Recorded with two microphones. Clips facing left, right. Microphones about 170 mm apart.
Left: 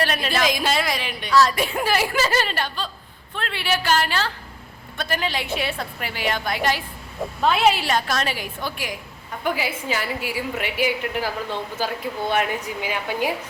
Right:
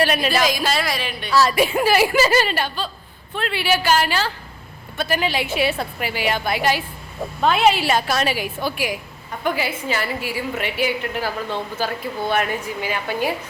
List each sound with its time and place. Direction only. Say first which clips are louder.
0.0 s a woman's voice: right 4 dB; 5° right (ahead or behind)
0.4 s a woman's voice: right 1 dB; 20° left (ahead or behind)
1.3 s a woman's voice: right 2 dB; 5° right (ahead or behind)
9.4 s a woman's voice: right 2 dB; 10° left (ahead or behind)
12.3 s a woman's voice: right 1 dB; 15° left (ahead or behind)